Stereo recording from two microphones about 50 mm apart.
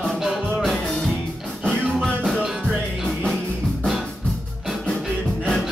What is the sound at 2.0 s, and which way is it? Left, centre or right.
Music, centre.